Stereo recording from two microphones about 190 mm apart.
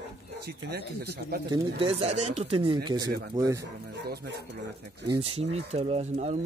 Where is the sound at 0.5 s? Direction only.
55° right (ahead or behind).